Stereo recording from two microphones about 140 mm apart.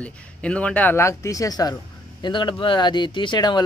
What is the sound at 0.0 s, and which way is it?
Speech, 10° left (ahead or behind).